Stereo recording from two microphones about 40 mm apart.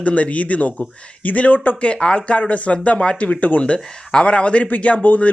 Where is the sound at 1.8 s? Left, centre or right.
Left.